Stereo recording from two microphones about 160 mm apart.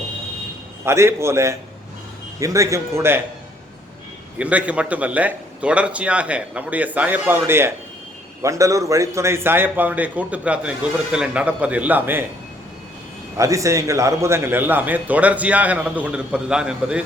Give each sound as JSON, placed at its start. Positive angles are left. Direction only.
{"t": 0.9, "sound": "a man's voice", "side_deg": -15}
{"t": 4.4, "sound": "a man's voice", "side_deg": -10}
{"t": 13.3, "sound": "a man's voice", "side_deg": -20}